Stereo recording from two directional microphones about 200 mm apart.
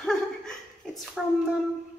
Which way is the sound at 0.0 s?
5° left (ahead or behind).